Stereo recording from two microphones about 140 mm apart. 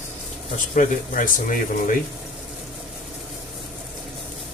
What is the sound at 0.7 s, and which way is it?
Speech, 70° left (ahead or behind).